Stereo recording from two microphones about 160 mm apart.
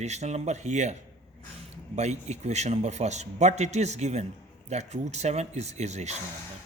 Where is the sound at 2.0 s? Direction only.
45° right (ahead or behind).